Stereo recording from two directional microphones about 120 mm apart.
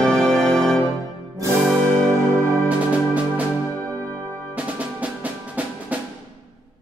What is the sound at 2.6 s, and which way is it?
Music, 10° right (ahead or behind).